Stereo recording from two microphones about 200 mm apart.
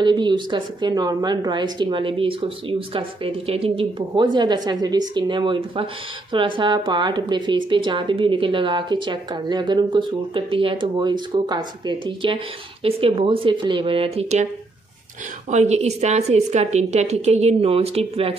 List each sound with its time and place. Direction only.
0.0 s a woman's voice: 20° right (ahead or behind)
15.5 s a woman's voice: 35° right (ahead or behind)